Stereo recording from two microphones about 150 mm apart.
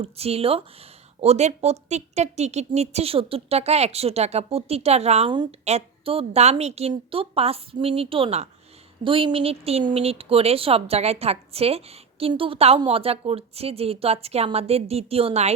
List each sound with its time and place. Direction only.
0.0 s speech: 40° right (ahead or behind)
5.3 s speech: 30° right (ahead or behind)
5.6 s speech: 40° right (ahead or behind)